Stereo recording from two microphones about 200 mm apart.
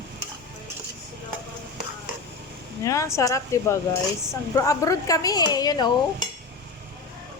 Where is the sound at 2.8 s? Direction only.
15° left (ahead or behind).